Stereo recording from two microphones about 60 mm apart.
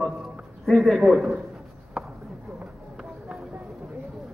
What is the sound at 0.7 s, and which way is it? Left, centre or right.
Speech, centre.